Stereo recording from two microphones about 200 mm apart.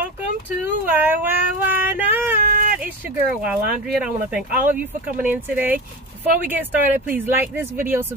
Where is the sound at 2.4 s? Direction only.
45° right (ahead or behind).